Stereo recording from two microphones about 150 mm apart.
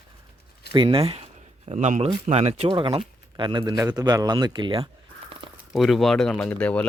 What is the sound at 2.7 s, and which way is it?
Speech, 35° right (ahead or behind).